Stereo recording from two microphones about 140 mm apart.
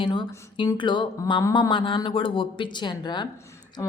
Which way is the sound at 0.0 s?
35° left (ahead or behind).